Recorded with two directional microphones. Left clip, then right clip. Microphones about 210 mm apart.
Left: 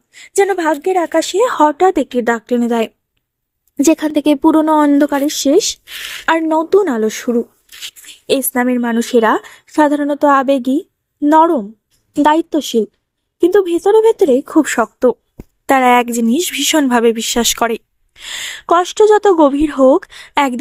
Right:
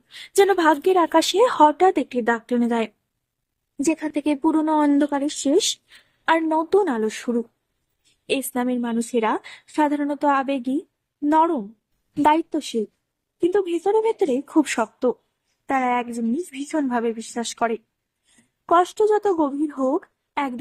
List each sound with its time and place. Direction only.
0.1 s a woman's voice: 10° left (ahead or behind); by 7.3 s 30° left (ahead or behind)
8.5 s a woman's voice: 25° left (ahead or behind)